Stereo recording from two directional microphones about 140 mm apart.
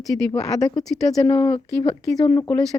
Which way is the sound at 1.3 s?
30° left (ahead or behind).